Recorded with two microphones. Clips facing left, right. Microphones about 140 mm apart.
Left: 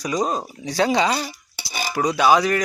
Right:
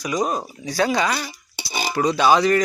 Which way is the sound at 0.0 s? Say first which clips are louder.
Even; 30° left (ahead or behind).